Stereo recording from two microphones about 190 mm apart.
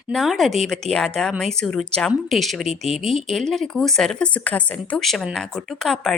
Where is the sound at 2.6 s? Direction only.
35° right (ahead or behind).